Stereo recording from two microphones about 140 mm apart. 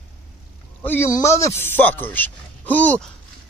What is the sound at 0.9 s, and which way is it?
Speech, 20° left (ahead or behind).